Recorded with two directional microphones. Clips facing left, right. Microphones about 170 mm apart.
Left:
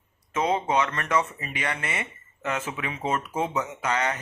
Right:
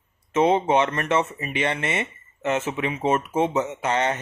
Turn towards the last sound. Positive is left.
turn(degrees=-25)  # may be behind; listen again after turning